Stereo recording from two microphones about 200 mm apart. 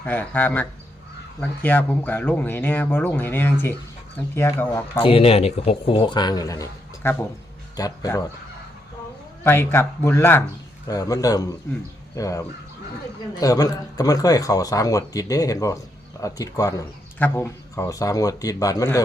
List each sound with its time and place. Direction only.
0.0 s speech: 10° left (ahead or behind)
4.9 s a man's voice: 25° left (ahead or behind)
9.4 s speech: 10° left (ahead or behind)